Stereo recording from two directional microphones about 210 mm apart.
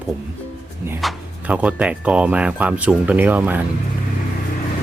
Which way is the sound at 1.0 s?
5° right (ahead or behind).